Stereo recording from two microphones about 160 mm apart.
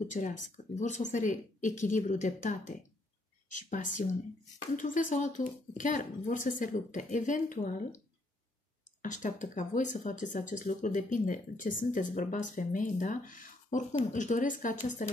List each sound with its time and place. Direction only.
0.1 s speech: 50° left (ahead or behind)
9.0 s speech: 50° left (ahead or behind)